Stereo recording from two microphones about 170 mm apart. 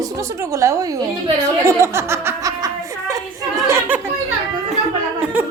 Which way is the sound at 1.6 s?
15° right (ahead or behind).